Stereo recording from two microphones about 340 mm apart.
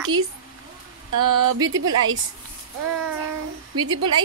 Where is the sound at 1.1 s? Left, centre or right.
Right.